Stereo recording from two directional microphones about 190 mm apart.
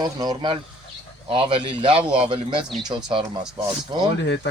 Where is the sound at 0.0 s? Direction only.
20° right (ahead or behind).